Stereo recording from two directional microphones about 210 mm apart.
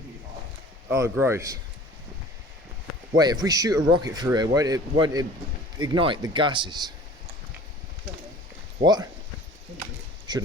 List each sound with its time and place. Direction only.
0.9 s speech: 10° right (ahead or behind)
3.2 s speech: 20° right (ahead or behind)
8.8 s speech: 20° right (ahead or behind)
10.3 s speech: 20° right (ahead or behind)